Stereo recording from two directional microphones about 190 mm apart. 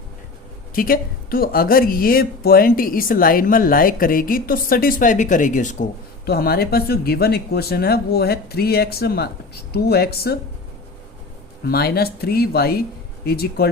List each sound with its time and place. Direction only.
0.7 s speech: 50° left (ahead or behind)
6.2 s speech: 55° left (ahead or behind)
11.6 s speech: 55° left (ahead or behind)